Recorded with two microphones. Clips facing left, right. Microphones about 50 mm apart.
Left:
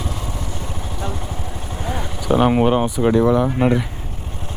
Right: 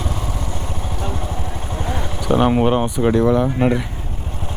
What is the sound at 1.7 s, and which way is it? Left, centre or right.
Speech, centre.